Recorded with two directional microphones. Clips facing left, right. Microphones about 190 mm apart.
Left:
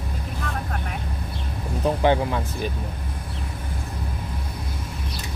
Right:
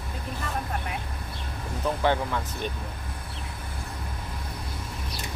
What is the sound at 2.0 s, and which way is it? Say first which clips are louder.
Speech: left 4 dB; 20° left (ahead or behind).